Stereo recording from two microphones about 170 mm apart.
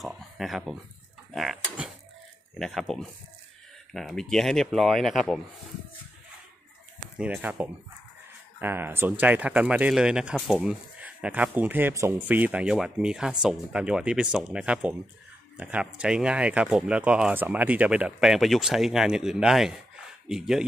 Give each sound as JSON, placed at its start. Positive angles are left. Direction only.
{"t": 0.0, "sound": "a sound", "side_deg": 0}
{"t": 2.6, "sound": "speech", "side_deg": 0}
{"t": 7.2, "sound": "speech", "side_deg": -5}